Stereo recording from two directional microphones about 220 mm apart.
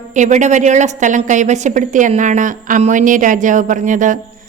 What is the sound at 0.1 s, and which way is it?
A woman's voice, 35° right (ahead or behind).